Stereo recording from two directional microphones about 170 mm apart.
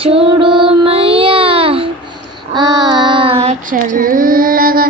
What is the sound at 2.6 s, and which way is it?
Child singing, 25° right (ahead or behind).